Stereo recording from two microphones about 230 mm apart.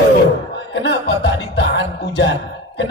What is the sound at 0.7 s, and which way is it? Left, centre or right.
A man's voice, left.